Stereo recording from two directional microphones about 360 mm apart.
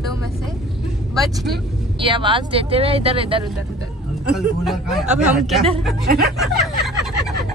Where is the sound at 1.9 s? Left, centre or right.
Centre.